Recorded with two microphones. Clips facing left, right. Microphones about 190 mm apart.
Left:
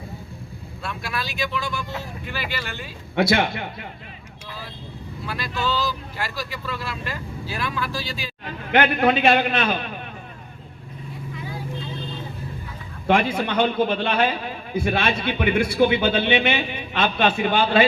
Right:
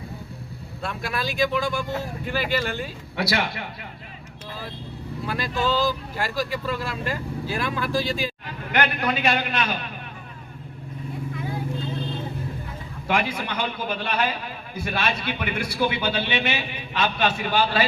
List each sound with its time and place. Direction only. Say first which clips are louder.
1.0 s speech: right 5 dB; 45° right (ahead or behind)
5.2 s speech: right 2 dB; 45° right (ahead or behind)
8.7 s a man's voice: left 6 dB; 50° left (ahead or behind)
13.1 s a man's voice: left 5 dB; 50° left (ahead or behind)